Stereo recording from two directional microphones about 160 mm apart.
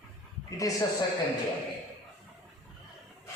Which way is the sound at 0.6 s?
20° left (ahead or behind).